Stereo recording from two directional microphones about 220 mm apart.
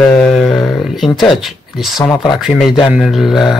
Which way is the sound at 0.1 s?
5° left (ahead or behind).